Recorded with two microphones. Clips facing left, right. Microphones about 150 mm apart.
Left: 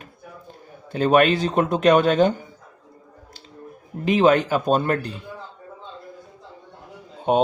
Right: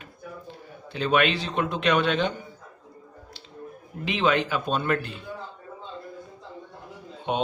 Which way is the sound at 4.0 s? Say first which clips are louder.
Left 7 dB; 45° left (ahead or behind).